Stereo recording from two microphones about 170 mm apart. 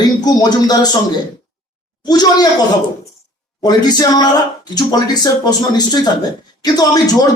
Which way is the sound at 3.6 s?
25° left (ahead or behind).